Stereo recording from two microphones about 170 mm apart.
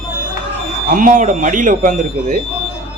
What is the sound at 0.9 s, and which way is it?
Speech, 50° right (ahead or behind).